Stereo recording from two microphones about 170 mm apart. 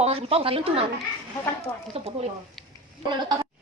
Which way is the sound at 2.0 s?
35° right (ahead or behind).